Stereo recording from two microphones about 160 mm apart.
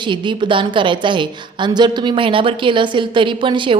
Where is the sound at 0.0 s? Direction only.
30° right (ahead or behind).